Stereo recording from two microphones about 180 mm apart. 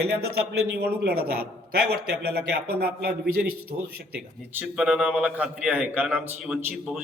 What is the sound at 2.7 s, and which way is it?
Speech, 60° right (ahead or behind).